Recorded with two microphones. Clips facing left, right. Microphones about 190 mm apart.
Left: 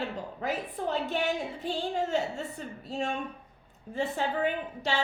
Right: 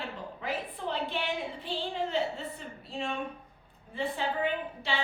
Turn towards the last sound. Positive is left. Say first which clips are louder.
# left 2 dB
turn(degrees=45)  # may be behind; listen again after turning